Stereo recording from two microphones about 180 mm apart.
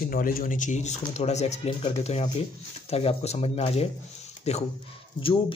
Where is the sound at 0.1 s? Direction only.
50° left (ahead or behind).